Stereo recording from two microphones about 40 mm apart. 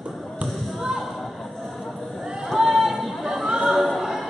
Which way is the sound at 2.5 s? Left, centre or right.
Centre.